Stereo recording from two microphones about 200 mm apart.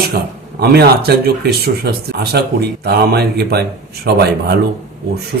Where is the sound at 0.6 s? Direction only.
50° right (ahead or behind).